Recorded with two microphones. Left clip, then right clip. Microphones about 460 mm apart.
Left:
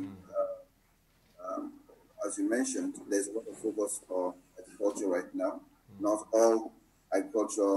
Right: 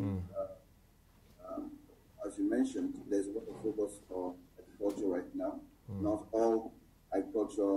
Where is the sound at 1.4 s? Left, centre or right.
Left.